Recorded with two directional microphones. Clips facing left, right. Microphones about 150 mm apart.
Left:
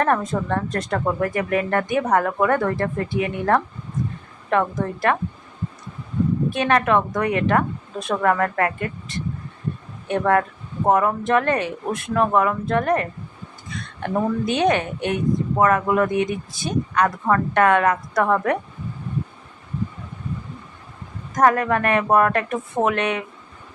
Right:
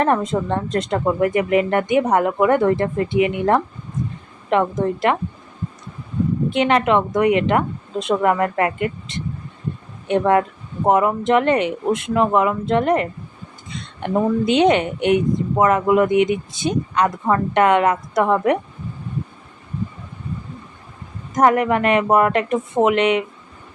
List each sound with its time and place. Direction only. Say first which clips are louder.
0.0 s speech: right 2 dB; 20° right (ahead or behind)
6.5 s speech: right 3 dB; 20° right (ahead or behind)
21.3 s speech: right 2 dB; 20° right (ahead or behind)